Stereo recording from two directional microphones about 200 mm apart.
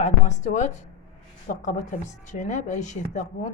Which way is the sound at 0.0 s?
35° left (ahead or behind).